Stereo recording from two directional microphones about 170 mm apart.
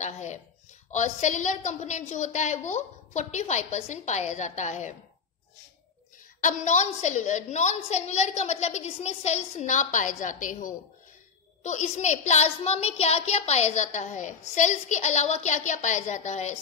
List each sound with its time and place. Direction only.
0.0 s a sound: 45° left (ahead or behind)
0.9 s a woman's voice: 45° left (ahead or behind)
6.4 s a woman's voice: 45° left (ahead or behind)